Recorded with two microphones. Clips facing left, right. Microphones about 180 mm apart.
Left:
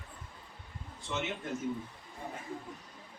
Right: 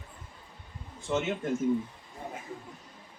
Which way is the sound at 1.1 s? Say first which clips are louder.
Right 7 dB; 45° right (ahead or behind).